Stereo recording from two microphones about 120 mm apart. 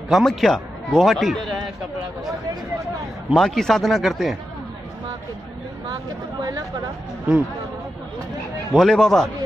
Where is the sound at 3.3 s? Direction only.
5° left (ahead or behind).